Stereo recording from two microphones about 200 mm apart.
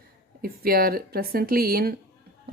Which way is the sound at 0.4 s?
50° right (ahead or behind).